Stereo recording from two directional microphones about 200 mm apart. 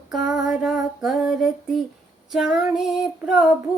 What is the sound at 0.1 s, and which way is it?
Female singing, 5° right (ahead or behind).